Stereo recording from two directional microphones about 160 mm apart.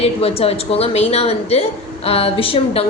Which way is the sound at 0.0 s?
40° left (ahead or behind).